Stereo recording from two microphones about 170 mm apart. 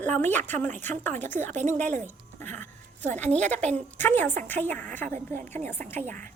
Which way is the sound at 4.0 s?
10° left (ahead or behind).